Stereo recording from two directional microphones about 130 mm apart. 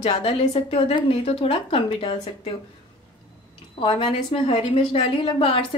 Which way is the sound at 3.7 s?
40° left (ahead or behind).